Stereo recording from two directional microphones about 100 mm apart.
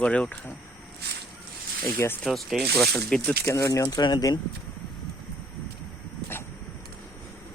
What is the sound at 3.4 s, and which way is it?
Speech, 35° left (ahead or behind).